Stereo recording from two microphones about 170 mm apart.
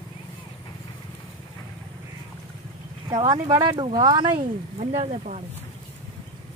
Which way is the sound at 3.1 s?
25° right (ahead or behind).